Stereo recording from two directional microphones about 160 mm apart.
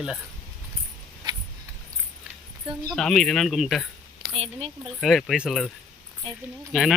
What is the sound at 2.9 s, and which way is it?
Speech, centre (ahead or behind).